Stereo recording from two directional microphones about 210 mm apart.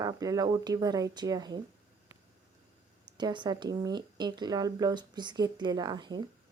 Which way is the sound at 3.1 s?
20° right (ahead or behind).